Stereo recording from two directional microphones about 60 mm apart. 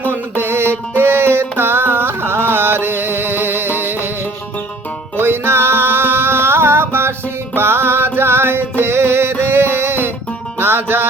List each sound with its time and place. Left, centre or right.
0.0 s music: right
5.1 s music: right